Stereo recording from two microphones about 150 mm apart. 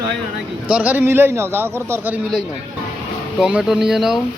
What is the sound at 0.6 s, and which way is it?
Speech, 10° right (ahead or behind).